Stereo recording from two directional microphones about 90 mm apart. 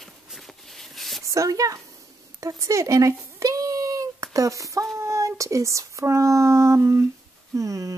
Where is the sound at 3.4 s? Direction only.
40° right (ahead or behind).